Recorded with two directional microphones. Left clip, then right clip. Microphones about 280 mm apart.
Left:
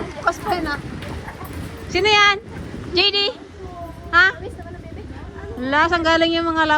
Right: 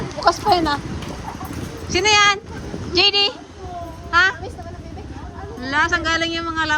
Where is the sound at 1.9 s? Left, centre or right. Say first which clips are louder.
Even; centre.